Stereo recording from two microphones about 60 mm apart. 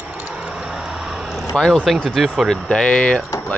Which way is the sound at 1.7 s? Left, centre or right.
Centre.